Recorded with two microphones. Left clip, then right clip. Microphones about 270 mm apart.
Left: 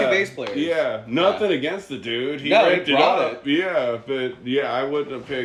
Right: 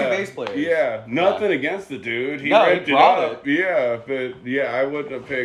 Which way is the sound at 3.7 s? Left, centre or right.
Centre.